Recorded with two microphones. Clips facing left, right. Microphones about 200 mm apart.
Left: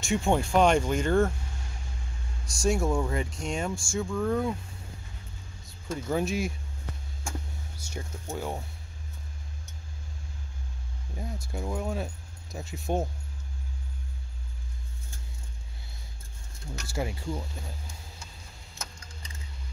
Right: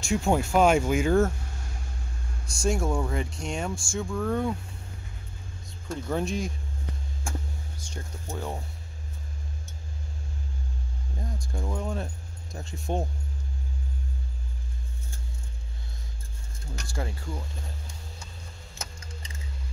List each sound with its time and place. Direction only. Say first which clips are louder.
0.0 s speech: right 1 dB; centre (ahead or behind)
2.5 s speech: left 1 dB; centre (ahead or behind)
5.9 s speech: even; 5° left (ahead or behind)
7.7 s speech: left 1 dB; 10° left (ahead or behind)
11.1 s speech: even; 5° left (ahead or behind)
16.8 s speech: left 3 dB; 10° left (ahead or behind)